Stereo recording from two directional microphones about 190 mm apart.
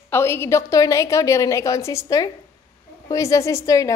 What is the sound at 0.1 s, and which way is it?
A woman's voice, 15° left (ahead or behind).